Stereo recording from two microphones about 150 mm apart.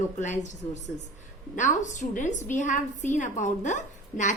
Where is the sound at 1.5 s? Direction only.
55° left (ahead or behind).